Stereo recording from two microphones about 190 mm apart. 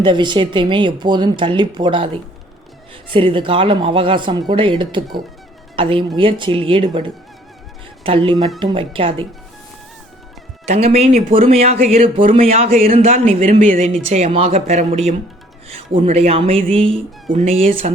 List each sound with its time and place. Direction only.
0.0 s speech: 25° right (ahead or behind)
10.7 s speech: 35° right (ahead or behind)